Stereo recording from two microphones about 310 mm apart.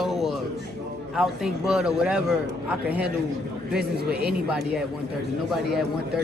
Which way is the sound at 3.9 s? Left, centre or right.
Right.